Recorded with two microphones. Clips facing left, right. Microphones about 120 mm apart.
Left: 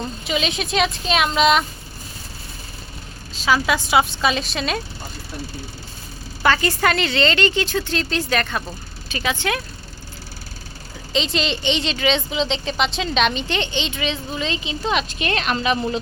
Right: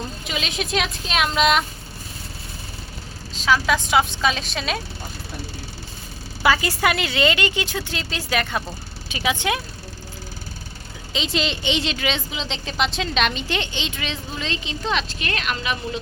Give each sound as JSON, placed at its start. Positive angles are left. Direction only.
{"t": 0.3, "sound": "a woman's voice", "side_deg": 0}
{"t": 3.3, "sound": "a woman's voice", "side_deg": 5}
{"t": 6.4, "sound": "speech", "side_deg": -10}
{"t": 11.1, "sound": "a woman's voice", "side_deg": -5}
{"t": 15.2, "sound": "a woman's voice", "side_deg": 30}